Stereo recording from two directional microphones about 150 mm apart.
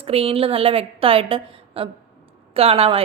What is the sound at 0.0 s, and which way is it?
A woman's voice, 40° right (ahead or behind).